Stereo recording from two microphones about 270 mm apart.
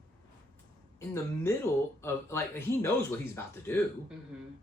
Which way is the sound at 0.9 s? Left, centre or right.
Centre.